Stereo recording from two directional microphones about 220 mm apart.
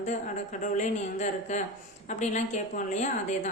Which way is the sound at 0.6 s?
30° left (ahead or behind).